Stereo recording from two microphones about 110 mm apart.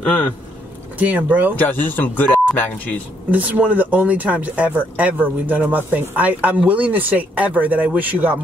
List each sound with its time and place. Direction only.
0.0 s speech: 15° left (ahead or behind)
0.9 s speech: 15° right (ahead or behind)
1.6 s speech: 15° left (ahead or behind)
3.3 s speech: 15° right (ahead or behind)